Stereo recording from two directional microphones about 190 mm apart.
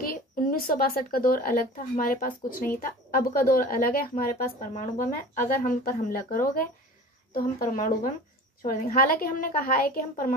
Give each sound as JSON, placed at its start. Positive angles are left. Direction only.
{"t": 0.0, "sound": "a woman's voice", "side_deg": 50}